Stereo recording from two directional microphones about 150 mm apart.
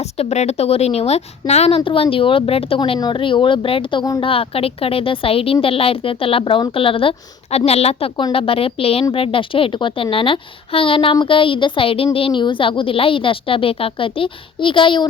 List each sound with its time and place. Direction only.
0.2 s speech: 45° left (ahead or behind)